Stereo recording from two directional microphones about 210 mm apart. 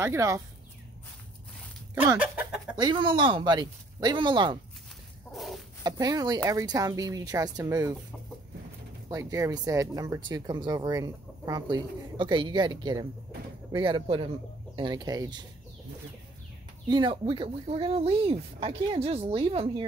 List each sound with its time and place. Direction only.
0.0 s speech: 15° right (ahead or behind)
2.0 s speech: 10° right (ahead or behind)
2.7 s speech: 20° right (ahead or behind)
5.3 s chicken: centre (ahead or behind)
5.9 s speech: 20° right (ahead or behind)
9.1 s speech: 15° right (ahead or behind)
16.8 s speech: 20° right (ahead or behind)